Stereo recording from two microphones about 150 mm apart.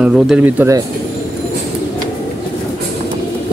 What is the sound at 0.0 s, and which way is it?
Speech, 5° right (ahead or behind).